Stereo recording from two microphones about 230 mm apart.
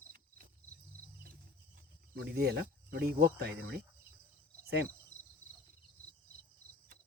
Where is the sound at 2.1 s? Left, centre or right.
Right.